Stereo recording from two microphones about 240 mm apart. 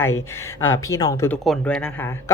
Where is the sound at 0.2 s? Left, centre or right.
Centre.